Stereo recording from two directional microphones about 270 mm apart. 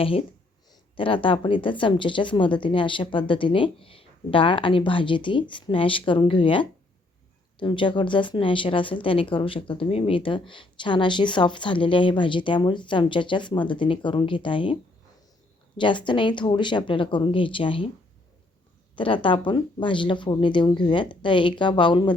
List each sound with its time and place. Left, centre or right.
0.0 s a woman's voice: centre
15.8 s a woman's voice: centre
18.9 s a woman's voice: centre